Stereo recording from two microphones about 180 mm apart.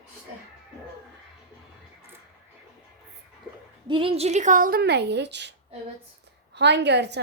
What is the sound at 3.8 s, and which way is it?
A woman's voice, 30° right (ahead or behind).